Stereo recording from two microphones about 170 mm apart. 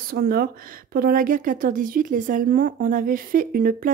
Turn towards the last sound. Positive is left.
turn(degrees=-60)  # may be behind; listen again after turning